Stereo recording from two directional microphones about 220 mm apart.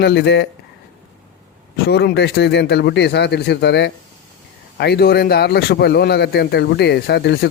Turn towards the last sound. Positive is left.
turn(degrees=45)  # may be behind; listen again after turning